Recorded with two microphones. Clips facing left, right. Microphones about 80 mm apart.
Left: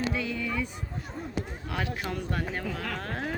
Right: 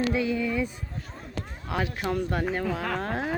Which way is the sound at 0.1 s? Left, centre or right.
Centre.